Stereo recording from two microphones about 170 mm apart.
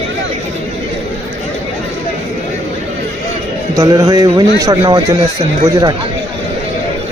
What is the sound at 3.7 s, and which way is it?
A man's voice, 20° right (ahead or behind).